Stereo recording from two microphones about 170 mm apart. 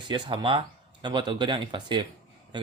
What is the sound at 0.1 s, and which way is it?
Speech, 30° right (ahead or behind).